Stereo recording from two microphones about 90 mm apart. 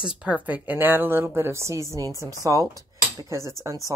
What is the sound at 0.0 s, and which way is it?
A woman's voice, 10° right (ahead or behind).